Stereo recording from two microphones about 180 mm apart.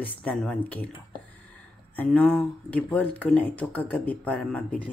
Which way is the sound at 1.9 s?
10° left (ahead or behind).